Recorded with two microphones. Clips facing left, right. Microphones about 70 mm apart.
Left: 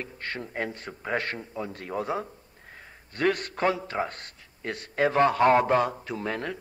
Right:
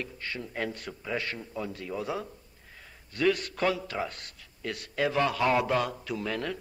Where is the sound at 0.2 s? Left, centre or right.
Left.